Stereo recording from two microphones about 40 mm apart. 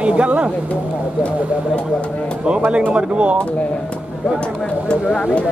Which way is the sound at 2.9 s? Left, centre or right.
Right.